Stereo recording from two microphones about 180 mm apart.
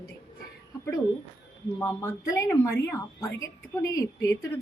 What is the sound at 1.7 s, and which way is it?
Speech, 20° left (ahead or behind).